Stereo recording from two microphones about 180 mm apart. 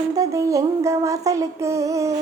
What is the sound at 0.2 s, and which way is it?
Music, 15° right (ahead or behind).